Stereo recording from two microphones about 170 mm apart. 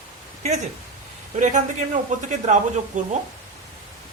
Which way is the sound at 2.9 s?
45° right (ahead or behind).